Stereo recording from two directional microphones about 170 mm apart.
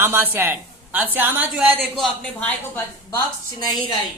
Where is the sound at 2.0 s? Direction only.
10° left (ahead or behind).